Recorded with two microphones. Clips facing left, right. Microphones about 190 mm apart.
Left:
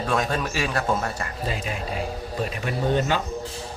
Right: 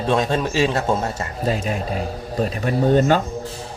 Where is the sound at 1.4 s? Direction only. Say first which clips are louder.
Right 8 dB; 45° right (ahead or behind).